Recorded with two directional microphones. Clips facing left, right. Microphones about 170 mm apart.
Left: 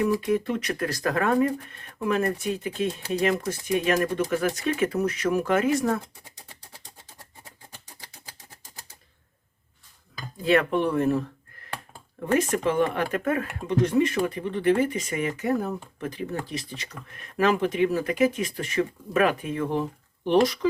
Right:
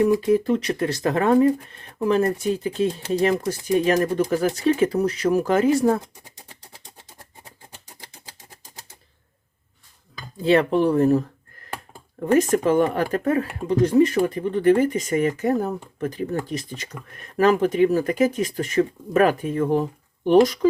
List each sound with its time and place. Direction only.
0.1 s speech: 30° right (ahead or behind)
10.4 s speech: 30° right (ahead or behind)
12.3 s speech: 40° right (ahead or behind)